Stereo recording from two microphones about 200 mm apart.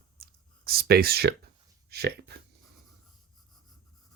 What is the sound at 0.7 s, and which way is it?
Speech, 50° right (ahead or behind).